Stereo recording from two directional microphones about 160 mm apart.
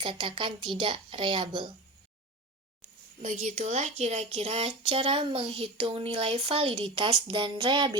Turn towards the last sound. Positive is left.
turn(degrees=-30)  # may be behind; listen again after turning